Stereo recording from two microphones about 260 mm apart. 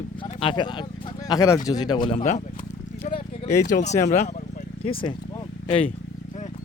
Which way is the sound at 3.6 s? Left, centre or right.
Left.